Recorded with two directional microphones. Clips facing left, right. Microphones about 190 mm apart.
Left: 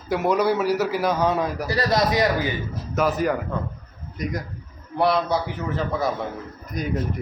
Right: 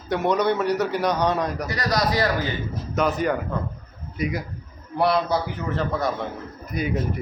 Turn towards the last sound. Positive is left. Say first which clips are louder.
# right 1 dB
turn(degrees=-5)  # may be behind; listen again after turning